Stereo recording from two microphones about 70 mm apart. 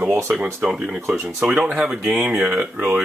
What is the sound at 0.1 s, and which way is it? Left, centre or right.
Speech, right.